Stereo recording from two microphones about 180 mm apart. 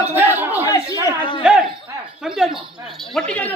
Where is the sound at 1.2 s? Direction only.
25° left (ahead or behind).